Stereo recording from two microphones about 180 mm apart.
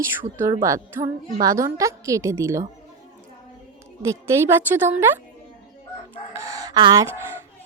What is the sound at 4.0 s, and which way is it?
A woman's voice, 15° right (ahead or behind).